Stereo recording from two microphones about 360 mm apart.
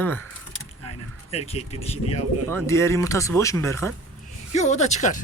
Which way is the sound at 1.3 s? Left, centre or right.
Centre.